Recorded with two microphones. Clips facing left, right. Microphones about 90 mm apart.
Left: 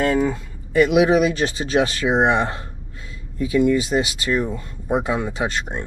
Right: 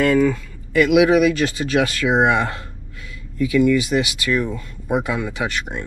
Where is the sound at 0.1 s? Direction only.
25° left (ahead or behind).